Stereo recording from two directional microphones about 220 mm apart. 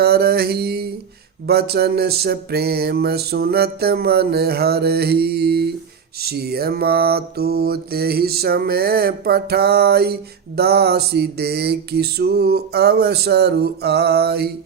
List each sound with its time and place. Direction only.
0.0 s mantra: 45° right (ahead or behind)
1.5 s music: 45° right (ahead or behind)